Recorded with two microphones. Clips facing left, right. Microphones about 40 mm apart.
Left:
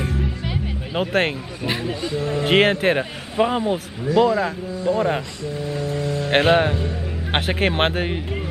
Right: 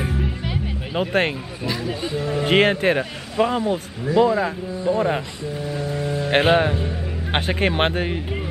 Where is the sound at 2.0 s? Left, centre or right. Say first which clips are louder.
Even; centre.